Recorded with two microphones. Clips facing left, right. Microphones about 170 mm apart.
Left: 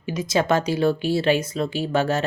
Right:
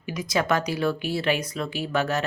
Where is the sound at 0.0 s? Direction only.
25° left (ahead or behind).